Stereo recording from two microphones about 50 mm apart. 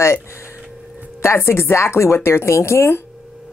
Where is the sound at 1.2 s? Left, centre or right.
Left.